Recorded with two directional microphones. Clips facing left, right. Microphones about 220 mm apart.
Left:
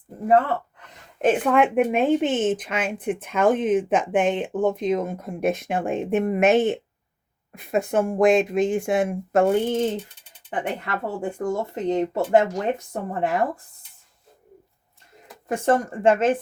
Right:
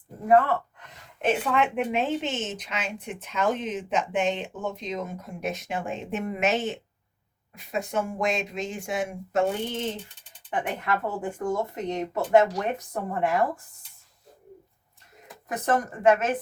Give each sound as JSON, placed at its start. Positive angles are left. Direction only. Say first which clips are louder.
{"t": 1.2, "sound": "a woman's voice", "louder": "left 6 dB", "side_deg": 50}
{"t": 10.5, "sound": "speech", "louder": "left 1 dB", "side_deg": 35}
{"t": 15.4, "sound": "speech", "louder": "left 5 dB", "side_deg": 30}